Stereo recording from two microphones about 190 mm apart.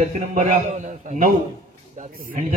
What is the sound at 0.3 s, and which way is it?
Speech, 40° right (ahead or behind).